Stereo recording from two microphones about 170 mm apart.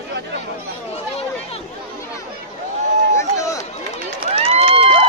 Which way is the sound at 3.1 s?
20° left (ahead or behind).